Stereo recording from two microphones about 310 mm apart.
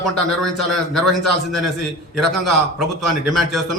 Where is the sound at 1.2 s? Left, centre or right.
Right.